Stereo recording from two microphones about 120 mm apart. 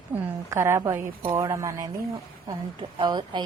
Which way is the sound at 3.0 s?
40° right (ahead or behind).